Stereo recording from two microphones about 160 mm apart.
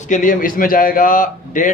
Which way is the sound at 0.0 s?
55° left (ahead or behind).